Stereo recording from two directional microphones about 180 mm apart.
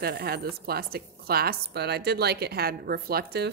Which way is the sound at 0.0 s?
60° right (ahead or behind).